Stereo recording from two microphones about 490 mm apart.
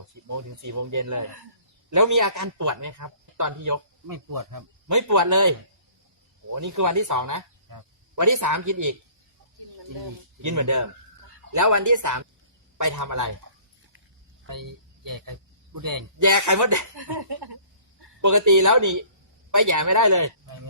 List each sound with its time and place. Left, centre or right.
0.3 s speech: right
10.4 s speech: right
14.4 s a man's voice: right
16.9 s speech: right
18.2 s speech: right